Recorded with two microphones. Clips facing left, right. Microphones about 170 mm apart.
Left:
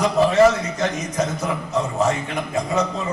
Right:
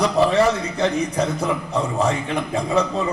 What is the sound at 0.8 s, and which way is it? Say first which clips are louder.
A man's voice: right 3 dB; 30° right (ahead or behind).